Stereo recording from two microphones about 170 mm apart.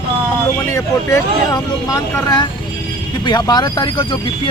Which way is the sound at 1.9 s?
25° left (ahead or behind).